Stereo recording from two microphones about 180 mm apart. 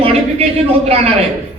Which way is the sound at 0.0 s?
35° right (ahead or behind).